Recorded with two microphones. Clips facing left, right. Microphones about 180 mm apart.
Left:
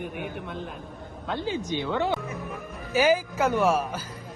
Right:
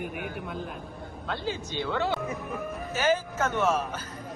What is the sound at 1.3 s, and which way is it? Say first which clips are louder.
A man's voice: left 4 dB; 15° left (ahead or behind).